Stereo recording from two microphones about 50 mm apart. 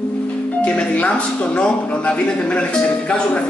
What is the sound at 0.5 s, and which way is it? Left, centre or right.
Speech, left.